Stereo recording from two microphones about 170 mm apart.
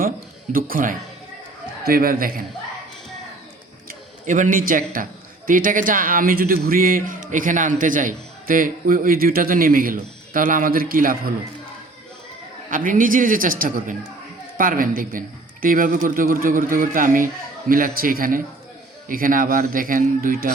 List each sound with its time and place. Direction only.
0.5 s a man's voice: 55° right (ahead or behind)
3.8 s a sound: 50° right (ahead or behind)
5.5 s speech: 50° right (ahead or behind)
12.7 s a man's voice: 50° right (ahead or behind)